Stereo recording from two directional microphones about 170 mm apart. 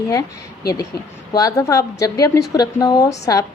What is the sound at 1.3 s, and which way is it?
A woman's voice, 20° left (ahead or behind).